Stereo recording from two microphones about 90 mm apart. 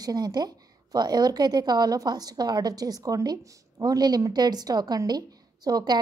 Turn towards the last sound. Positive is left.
turn(degrees=-50)  # may be behind; listen again after turning